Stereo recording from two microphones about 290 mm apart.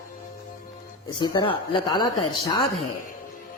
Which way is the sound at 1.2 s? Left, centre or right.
Centre.